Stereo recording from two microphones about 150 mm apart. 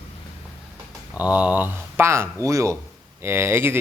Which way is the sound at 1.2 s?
10° right (ahead or behind).